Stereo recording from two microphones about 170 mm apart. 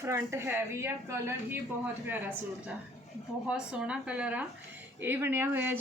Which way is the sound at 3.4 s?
5° right (ahead or behind).